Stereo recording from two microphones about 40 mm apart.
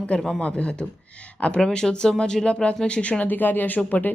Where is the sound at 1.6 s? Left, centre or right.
Left.